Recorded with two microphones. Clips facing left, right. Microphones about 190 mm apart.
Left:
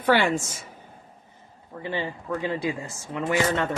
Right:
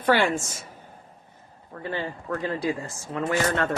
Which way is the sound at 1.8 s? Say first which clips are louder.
Left 1 dB; 15° left (ahead or behind).